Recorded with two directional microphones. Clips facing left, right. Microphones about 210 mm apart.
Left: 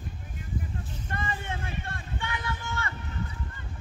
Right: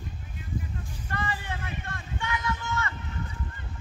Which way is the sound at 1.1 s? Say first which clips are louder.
Right 1 dB; 25° left (ahead or behind).